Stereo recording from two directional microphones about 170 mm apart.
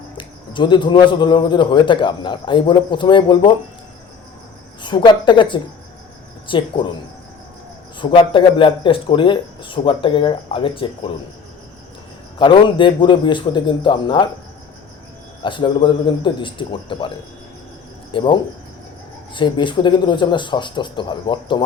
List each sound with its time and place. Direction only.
0.2 s a man's voice: 30° left (ahead or behind)
4.8 s a man's voice: 25° left (ahead or behind)
7.9 s a man's voice: 30° left (ahead or behind)
12.4 s a man's voice: 30° left (ahead or behind)
15.4 s a man's voice: 30° left (ahead or behind)
18.1 s a man's voice: 30° left (ahead or behind)